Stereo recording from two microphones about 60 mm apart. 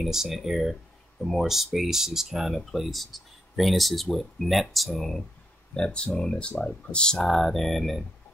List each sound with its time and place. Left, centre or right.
0.0 s speech: centre
5.9 s speech: centre